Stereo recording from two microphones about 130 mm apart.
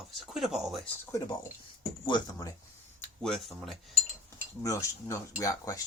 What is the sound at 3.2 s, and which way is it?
Speech, centre (ahead or behind).